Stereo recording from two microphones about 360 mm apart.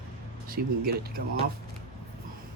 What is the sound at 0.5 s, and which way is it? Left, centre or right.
Speech, right.